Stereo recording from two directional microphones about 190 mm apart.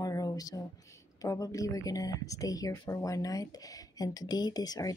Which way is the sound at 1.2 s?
20° left (ahead or behind).